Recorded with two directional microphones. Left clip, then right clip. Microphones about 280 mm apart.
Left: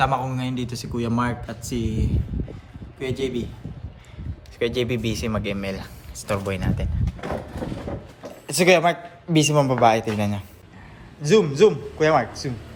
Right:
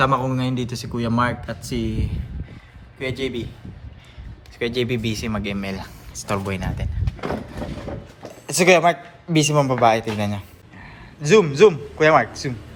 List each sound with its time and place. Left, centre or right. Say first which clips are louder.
0.0 s a man's voice: right 3 dB; centre
0.4 s speech: right 3 dB; centre
4.6 s speech: even; centre
8.4 s a man's voice: right 2 dB; centre